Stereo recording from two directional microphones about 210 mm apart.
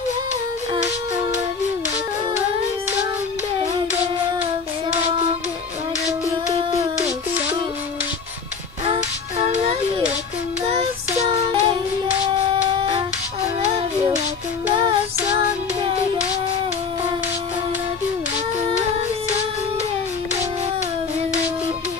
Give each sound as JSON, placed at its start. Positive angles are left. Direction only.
{"t": 9.5, "sound": "music", "side_deg": -25}
{"t": 10.7, "sound": "child singing", "side_deg": -30}